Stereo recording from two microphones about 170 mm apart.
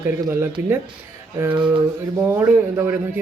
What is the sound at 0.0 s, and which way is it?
Speech, 15° right (ahead or behind).